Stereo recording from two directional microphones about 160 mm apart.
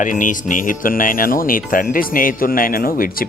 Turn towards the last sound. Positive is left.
turn(degrees=65)  # may be behind; listen again after turning